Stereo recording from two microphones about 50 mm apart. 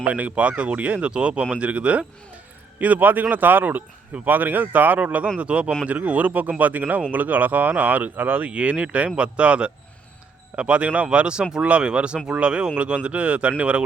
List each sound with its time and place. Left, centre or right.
0.0 s speech: right
8.4 s speech: right